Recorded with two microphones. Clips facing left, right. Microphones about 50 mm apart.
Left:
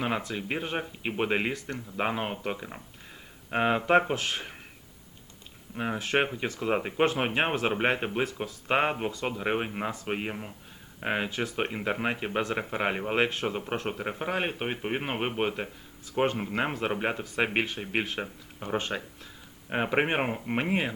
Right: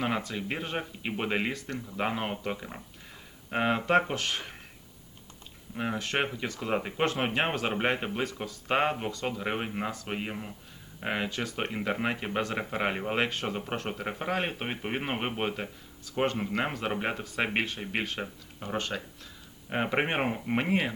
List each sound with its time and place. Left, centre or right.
0.0 s speech: centre
5.7 s speech: centre
8.9 s speech: centre
18.6 s speech: centre
19.7 s speech: centre